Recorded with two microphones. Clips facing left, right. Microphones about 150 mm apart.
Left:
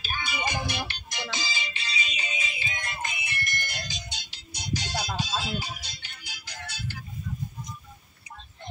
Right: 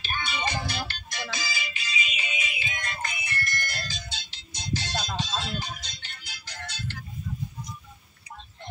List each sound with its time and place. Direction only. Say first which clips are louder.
0.0 s music: right 1 dB; 10° left (ahead or behind)